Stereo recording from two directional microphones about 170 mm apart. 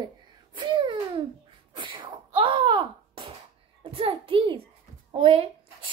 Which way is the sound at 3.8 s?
30° right (ahead or behind).